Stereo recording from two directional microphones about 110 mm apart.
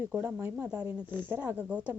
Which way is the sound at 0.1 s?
20° right (ahead or behind).